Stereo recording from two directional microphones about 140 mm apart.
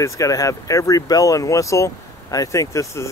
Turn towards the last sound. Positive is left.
turn(degrees=20)  # may be behind; listen again after turning